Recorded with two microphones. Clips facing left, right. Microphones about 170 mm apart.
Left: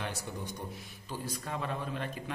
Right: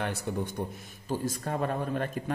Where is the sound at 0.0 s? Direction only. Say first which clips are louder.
Right 7 dB; 55° right (ahead or behind).